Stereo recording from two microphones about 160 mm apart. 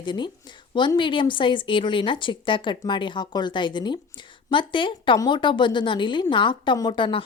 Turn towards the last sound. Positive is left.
turn(degrees=30)  # may be behind; listen again after turning